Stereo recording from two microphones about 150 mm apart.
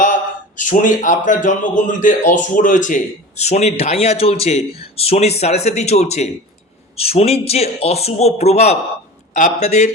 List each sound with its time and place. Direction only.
0.0 s speech: 55° left (ahead or behind)